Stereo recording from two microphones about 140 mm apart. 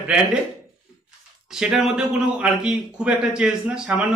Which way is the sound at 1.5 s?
5° right (ahead or behind).